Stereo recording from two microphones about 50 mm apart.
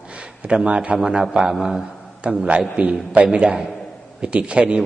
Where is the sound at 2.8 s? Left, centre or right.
Right.